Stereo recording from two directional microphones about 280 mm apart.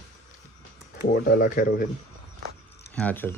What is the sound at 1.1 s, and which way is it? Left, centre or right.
Speech, left.